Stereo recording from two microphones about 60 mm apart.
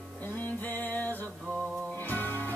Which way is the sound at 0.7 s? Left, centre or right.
Left.